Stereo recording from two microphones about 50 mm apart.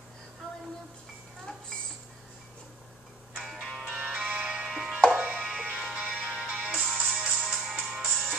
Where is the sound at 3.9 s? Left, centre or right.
Right.